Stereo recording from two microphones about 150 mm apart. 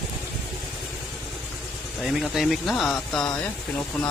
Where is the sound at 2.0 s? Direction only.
Centre (ahead or behind).